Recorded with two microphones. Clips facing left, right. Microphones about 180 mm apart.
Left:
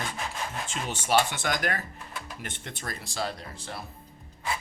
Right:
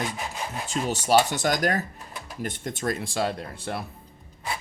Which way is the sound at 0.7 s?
40° right (ahead or behind).